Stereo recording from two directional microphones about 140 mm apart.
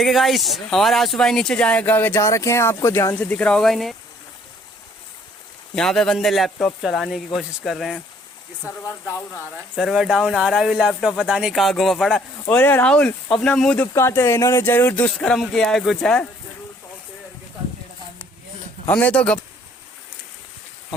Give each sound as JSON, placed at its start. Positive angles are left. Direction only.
{"t": 0.0, "sound": "speech", "side_deg": 0}
{"t": 3.2, "sound": "speech", "side_deg": 10}
{"t": 5.7, "sound": "speech", "side_deg": 5}
{"t": 8.6, "sound": "speech", "side_deg": 20}
{"t": 9.7, "sound": "speech", "side_deg": -5}
{"t": 15.1, "sound": "speech", "side_deg": 5}
{"t": 18.9, "sound": "speech", "side_deg": 10}